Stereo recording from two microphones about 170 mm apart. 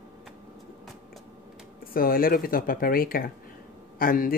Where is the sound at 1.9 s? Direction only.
60° left (ahead or behind).